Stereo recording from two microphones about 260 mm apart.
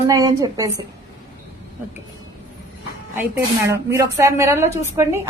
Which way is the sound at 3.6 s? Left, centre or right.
Centre.